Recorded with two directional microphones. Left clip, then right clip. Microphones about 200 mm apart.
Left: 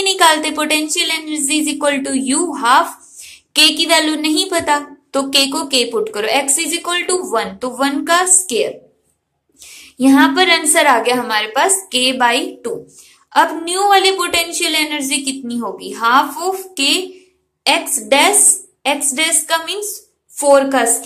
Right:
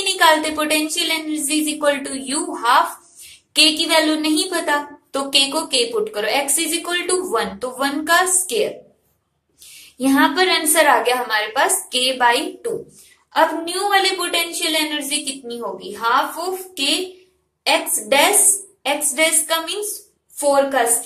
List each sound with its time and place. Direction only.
0.0 s a woman's voice: 25° left (ahead or behind)
9.8 s female singing: 25° left (ahead or behind)
10.7 s a woman's voice: 25° left (ahead or behind)